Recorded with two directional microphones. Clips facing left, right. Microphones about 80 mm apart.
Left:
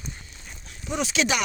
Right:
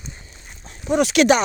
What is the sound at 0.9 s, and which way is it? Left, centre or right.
Speech, right.